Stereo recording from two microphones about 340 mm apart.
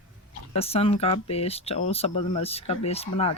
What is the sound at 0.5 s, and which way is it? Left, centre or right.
Speech, centre.